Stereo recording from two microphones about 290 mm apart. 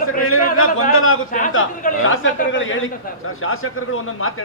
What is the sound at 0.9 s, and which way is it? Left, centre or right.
Speech, left.